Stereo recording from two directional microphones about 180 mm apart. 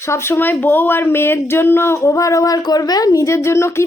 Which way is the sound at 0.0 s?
15° left (ahead or behind).